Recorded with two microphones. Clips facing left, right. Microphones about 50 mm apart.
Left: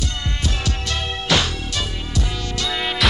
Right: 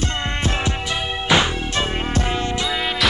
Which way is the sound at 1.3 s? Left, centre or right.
Right.